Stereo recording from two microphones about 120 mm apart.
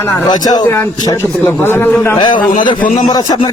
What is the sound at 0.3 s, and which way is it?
Speech, 35° left (ahead or behind).